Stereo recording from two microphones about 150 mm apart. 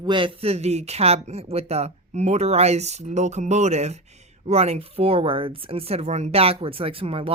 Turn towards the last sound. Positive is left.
turn(degrees=-40)  # may be behind; listen again after turning